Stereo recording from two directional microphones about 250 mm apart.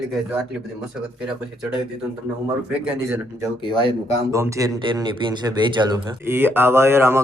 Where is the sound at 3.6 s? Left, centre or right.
Centre.